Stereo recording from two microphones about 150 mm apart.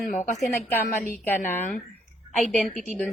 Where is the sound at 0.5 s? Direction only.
15° left (ahead or behind).